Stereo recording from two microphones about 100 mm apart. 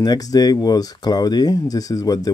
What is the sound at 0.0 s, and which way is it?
Speech, 40° left (ahead or behind).